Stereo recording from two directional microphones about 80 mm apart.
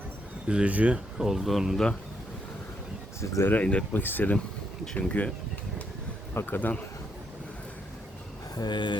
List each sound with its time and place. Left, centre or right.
0.4 s speech: centre
1.2 s speech: centre
3.2 s speech: left
3.5 s speech: centre
6.3 s speech: left
8.5 s speech: left